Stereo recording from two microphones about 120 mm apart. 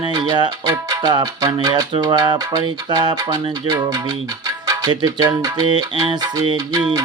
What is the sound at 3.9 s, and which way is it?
Speech, 30° right (ahead or behind).